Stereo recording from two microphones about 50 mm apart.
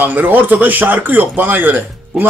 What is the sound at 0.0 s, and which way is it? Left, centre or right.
Speech, right.